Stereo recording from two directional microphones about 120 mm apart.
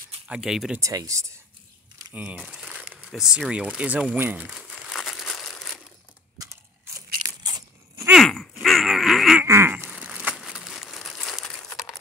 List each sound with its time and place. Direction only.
0.3 s speech: 5° right (ahead or behind)
0.7 s speech: 25° right (ahead or behind)
2.1 s speech: 10° right (ahead or behind)
2.4 s crumpling: 5° right (ahead or behind)
3.0 s speech: 5° right (ahead or behind)
4.7 s crumpling: centre (ahead or behind)
6.3 s crunch: 30° right (ahead or behind)
8.1 s grunt: centre (ahead or behind)
8.6 s a sound: centre (ahead or behind)
9.4 s crumpling: 20° right (ahead or behind); by 11.6 s centre (ahead or behind)